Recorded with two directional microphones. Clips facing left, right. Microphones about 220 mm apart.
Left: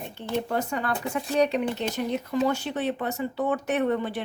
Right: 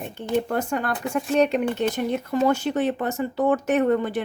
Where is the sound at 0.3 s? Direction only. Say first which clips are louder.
Right 4 dB; 50° right (ahead or behind).